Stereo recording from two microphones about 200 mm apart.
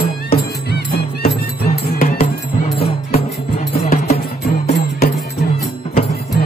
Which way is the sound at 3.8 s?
35° left (ahead or behind).